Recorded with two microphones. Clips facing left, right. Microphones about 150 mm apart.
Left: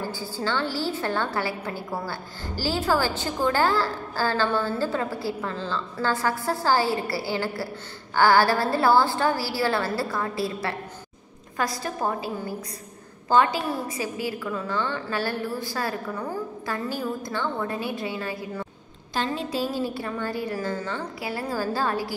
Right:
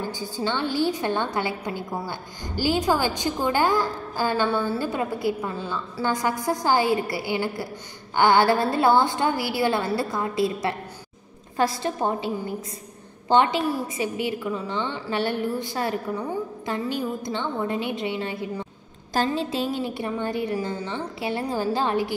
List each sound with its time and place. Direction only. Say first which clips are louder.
0.0 s a woman's voice: right 1 dB; 20° right (ahead or behind)
19.1 s a woman's voice: right 4 dB; 40° right (ahead or behind)
19.5 s a woman's voice: even; 20° right (ahead or behind)